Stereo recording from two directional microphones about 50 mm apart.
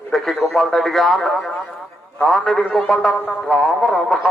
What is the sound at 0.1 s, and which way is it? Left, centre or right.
Speech, centre.